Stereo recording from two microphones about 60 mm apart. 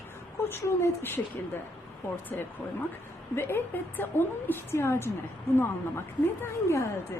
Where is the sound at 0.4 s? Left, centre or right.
Left.